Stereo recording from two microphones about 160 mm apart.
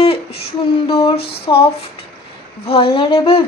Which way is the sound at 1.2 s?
85° left.